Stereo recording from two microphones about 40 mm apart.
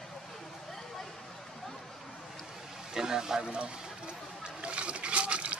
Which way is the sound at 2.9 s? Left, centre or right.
Centre.